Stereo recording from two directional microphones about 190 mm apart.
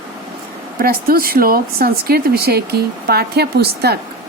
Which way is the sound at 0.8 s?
50° right (ahead or behind).